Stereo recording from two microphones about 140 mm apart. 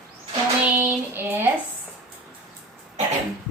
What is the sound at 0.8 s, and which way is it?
Child singing, 15° right (ahead or behind).